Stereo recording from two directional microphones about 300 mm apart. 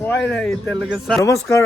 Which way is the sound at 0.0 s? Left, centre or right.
Centre.